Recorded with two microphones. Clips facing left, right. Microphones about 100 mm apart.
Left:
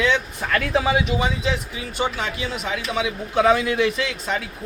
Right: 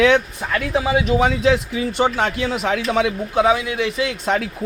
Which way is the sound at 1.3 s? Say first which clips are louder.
Right 8 dB; 75° right (ahead or behind).